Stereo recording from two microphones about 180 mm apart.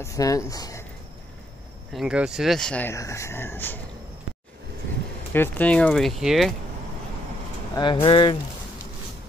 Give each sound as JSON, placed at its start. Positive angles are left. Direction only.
{"t": 0.0, "sound": "speech", "side_deg": 20}
{"t": 2.0, "sound": "speech", "side_deg": -5}
{"t": 5.3, "sound": "speech", "side_deg": 10}
{"t": 7.7, "sound": "speech", "side_deg": 25}